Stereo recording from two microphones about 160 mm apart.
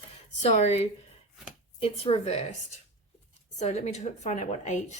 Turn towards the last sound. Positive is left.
turn(degrees=45)  # may be behind; listen again after turning